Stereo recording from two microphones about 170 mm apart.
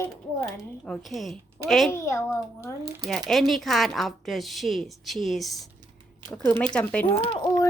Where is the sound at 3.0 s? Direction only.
Centre (ahead or behind).